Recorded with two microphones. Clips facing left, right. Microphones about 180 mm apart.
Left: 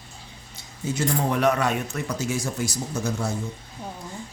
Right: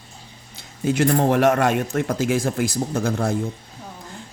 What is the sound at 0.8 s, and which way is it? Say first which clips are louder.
Speech: right 7 dB; 60° right (ahead or behind).